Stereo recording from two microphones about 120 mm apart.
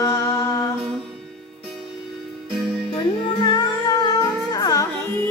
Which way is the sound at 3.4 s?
35° left (ahead or behind).